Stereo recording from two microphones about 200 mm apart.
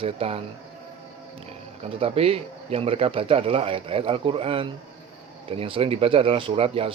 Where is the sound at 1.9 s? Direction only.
30° right (ahead or behind).